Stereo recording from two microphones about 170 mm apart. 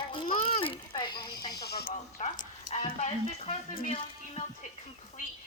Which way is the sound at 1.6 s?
70° left (ahead or behind).